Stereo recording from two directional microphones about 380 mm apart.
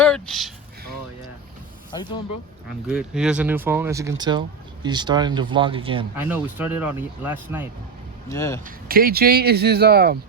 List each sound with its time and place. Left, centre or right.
0.0 s a sound: centre
1.9 s speech: centre
2.8 s speech: centre
8.3 s speech: centre
8.6 s speech: right